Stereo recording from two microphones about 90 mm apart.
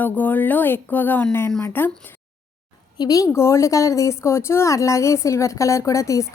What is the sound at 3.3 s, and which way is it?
A woman's voice, 30° left (ahead or behind).